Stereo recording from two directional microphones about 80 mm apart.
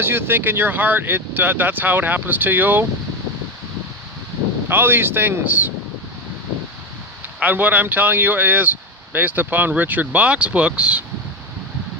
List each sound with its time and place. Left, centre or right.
0.0 s speech: right
4.7 s speech: right
7.3 s speech: right